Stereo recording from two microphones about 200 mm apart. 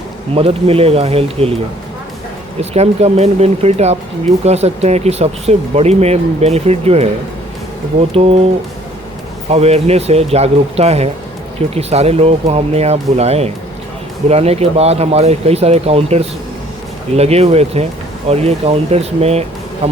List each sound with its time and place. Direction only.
0.3 s speech: 30° right (ahead or behind)
2.6 s speech: 30° right (ahead or behind)
8.1 s speech: 30° right (ahead or behind)
9.5 s speech: 30° right (ahead or behind)